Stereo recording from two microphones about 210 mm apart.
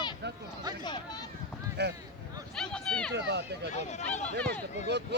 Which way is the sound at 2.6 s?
5° left (ahead or behind).